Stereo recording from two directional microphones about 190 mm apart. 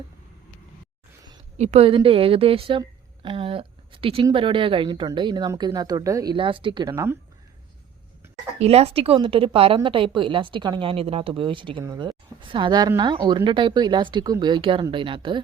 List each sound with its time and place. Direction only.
1.5 s speech: 35° right (ahead or behind); by 7.2 s 15° right (ahead or behind)
8.5 s speech: 35° right (ahead or behind)